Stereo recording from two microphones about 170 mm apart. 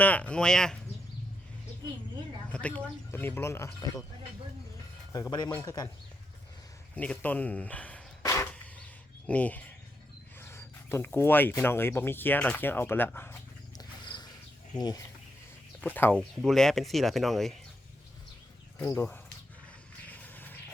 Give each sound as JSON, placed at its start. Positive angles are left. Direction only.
{"t": 0.0, "sound": "speech", "side_deg": 10}
{"t": 2.5, "sound": "speech", "side_deg": 5}
{"t": 5.1, "sound": "speech", "side_deg": 20}
{"t": 6.9, "sound": "speech", "side_deg": 10}
{"t": 8.2, "sound": "a sound", "side_deg": 15}
{"t": 10.4, "sound": "speech", "side_deg": 15}
{"t": 14.8, "sound": "speech", "side_deg": 25}
{"t": 15.8, "sound": "speech", "side_deg": 10}
{"t": 18.8, "sound": "speech", "side_deg": 15}
{"t": 20.1, "sound": "a sound", "side_deg": 10}